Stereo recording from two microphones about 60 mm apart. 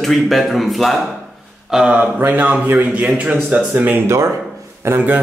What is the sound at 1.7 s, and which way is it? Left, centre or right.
Speech, right.